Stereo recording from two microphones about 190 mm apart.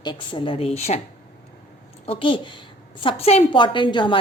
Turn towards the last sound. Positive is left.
turn(degrees=25)  # may be behind; listen again after turning